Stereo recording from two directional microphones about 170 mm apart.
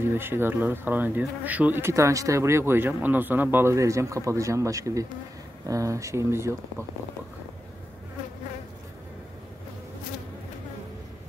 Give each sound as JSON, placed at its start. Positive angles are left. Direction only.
{"t": 0.0, "sound": "speech", "side_deg": -15}